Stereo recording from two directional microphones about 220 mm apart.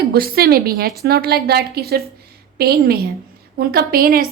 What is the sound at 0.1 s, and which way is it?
A woman's voice, 45° right (ahead or behind).